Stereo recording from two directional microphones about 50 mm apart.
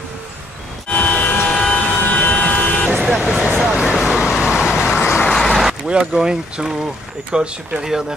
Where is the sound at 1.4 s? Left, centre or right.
Centre.